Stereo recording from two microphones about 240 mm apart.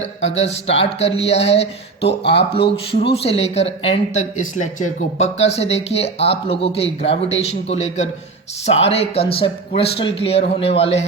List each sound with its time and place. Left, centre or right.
0.3 s speech: left
2.0 s speech: left
2.6 s speech: left